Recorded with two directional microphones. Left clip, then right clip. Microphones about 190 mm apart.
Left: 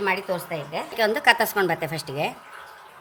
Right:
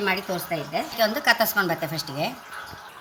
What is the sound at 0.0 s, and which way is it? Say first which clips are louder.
A woman's voice: left 1 dB; 45° left (ahead or behind).